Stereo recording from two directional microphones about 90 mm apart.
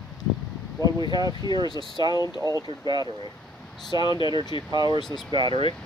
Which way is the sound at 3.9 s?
55° left (ahead or behind).